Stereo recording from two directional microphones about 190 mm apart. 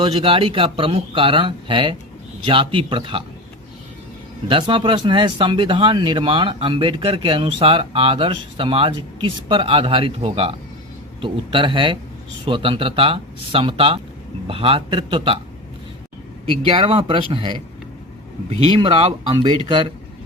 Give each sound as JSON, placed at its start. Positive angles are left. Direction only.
{"t": 0.0, "sound": "speech", "side_deg": -30}
{"t": 4.4, "sound": "speech", "side_deg": -25}
{"t": 16.5, "sound": "speech", "side_deg": -30}
{"t": 18.6, "sound": "speech", "side_deg": -30}